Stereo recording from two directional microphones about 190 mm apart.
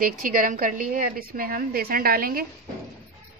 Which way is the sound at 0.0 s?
45° right (ahead or behind).